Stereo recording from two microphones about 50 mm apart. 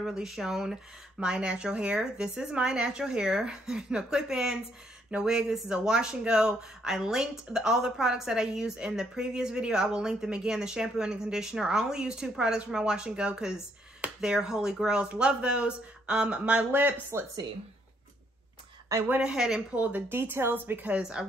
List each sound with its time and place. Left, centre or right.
0.0 s speech: centre
17.1 s speech: right
18.9 s a woman's voice: right
19.2 s speech: centre
19.7 s speech: right
20.1 s a woman's voice: right
20.9 s speech: centre